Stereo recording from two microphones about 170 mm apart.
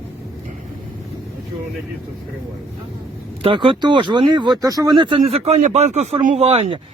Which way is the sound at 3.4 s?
35° right (ahead or behind).